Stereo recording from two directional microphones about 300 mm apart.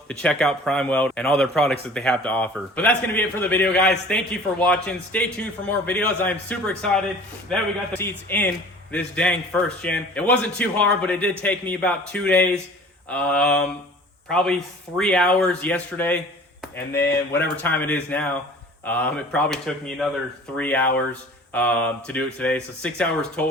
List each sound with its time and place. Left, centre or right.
0.1 s a man's voice: centre